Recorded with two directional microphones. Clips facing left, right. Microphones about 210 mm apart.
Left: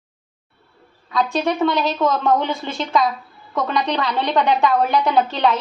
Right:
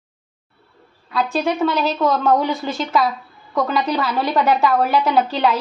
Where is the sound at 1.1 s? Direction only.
5° right (ahead or behind).